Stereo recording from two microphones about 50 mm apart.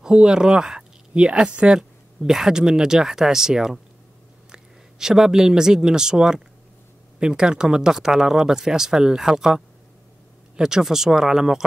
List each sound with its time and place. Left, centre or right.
0.0 s speech: centre
1.8 s speech: centre